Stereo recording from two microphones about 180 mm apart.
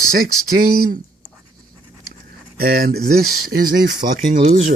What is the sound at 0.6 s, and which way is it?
Speech, 55° right (ahead or behind).